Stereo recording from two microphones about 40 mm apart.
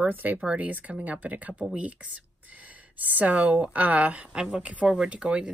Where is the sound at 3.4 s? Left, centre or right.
Right.